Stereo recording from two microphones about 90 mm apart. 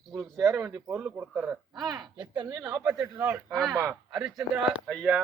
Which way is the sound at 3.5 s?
5° left (ahead or behind).